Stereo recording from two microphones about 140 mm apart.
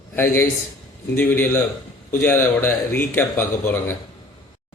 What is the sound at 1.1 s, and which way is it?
Speech, 15° left (ahead or behind).